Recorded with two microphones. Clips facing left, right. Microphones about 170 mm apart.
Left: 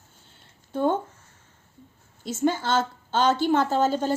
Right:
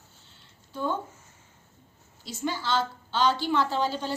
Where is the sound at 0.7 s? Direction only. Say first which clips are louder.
Left 7 dB; 55° left (ahead or behind).